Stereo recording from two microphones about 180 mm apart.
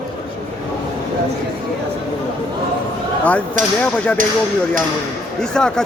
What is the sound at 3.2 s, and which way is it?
Speech, 10° left (ahead or behind).